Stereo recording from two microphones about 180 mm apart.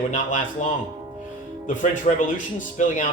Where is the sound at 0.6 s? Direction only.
45° left (ahead or behind).